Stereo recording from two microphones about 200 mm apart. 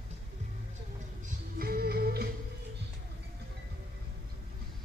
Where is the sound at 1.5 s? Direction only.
50° right (ahead or behind).